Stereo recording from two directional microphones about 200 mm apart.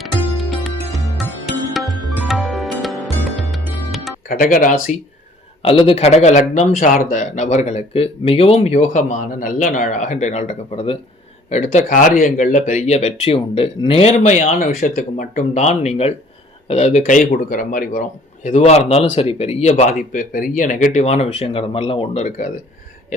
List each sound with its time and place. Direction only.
0.5 s music: centre (ahead or behind)
4.3 s speech: 45° left (ahead or behind)
5.6 s speech: 30° left (ahead or behind)
14.6 s speech: 45° left (ahead or behind)